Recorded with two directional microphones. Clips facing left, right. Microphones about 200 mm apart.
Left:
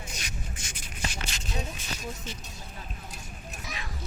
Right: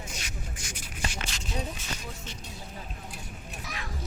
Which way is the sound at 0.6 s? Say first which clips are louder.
Right 2 dB; 25° left (ahead or behind).